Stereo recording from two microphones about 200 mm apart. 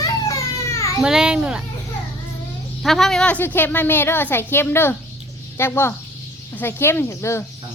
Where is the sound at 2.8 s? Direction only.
Centre (ahead or behind).